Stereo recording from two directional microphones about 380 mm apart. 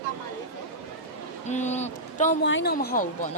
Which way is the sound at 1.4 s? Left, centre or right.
Centre.